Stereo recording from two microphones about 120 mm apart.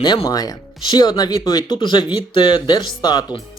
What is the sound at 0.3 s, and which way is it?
Speech, 30° left (ahead or behind).